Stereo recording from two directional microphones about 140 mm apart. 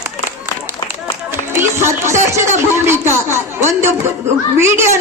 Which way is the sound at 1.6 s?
20° right (ahead or behind).